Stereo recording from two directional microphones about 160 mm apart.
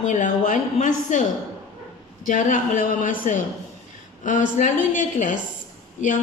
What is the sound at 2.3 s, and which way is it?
A woman's voice, 55° left (ahead or behind).